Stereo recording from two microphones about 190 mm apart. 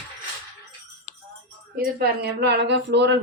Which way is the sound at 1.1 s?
70° left (ahead or behind).